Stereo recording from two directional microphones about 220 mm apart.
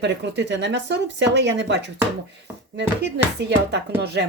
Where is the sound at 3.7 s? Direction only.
50° right (ahead or behind).